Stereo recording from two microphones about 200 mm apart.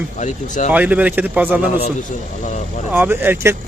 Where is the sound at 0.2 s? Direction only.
35° left (ahead or behind).